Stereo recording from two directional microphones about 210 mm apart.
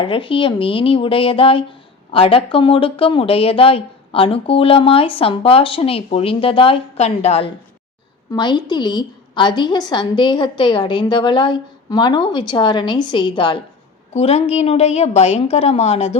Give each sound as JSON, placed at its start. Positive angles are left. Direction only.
{"t": 0.0, "sound": "speech", "side_deg": 25}